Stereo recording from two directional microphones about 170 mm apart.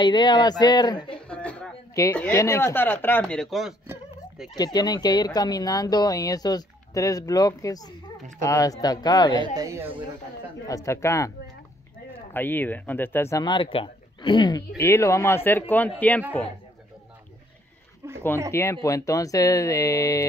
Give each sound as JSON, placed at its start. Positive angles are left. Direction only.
{"t": 0.0, "sound": "speech", "side_deg": 25}
{"t": 1.1, "sound": "a sound", "side_deg": 5}
{"t": 2.1, "sound": "speech", "side_deg": 15}
{"t": 4.7, "sound": "speech", "side_deg": 25}
{"t": 9.4, "sound": "speech", "side_deg": -20}
{"t": 10.7, "sound": "speech", "side_deg": 20}
{"t": 12.4, "sound": "speech", "side_deg": 10}
{"t": 14.8, "sound": "speech", "side_deg": 15}
{"t": 18.0, "sound": "a sound", "side_deg": -20}
{"t": 18.5, "sound": "speech", "side_deg": 15}